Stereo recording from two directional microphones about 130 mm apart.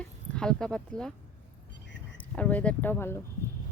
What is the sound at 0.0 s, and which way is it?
Speech, 5° left (ahead or behind).